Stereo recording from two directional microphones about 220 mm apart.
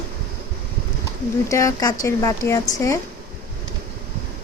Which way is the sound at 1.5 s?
15° left (ahead or behind).